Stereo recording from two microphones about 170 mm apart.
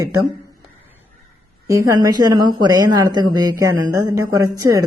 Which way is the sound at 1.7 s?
20° right (ahead or behind).